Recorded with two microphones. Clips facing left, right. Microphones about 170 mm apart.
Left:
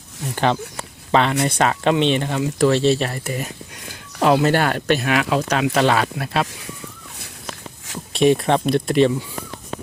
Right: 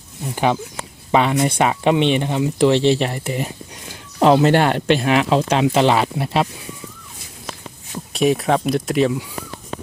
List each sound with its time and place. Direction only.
0.3 s speech: 10° right (ahead or behind)
8.1 s speech: centre (ahead or behind)